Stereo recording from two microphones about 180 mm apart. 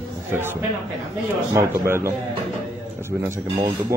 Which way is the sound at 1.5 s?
15° right (ahead or behind).